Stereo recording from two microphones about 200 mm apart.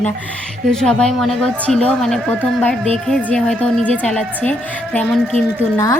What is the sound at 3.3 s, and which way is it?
A woman's voice, 5° left (ahead or behind).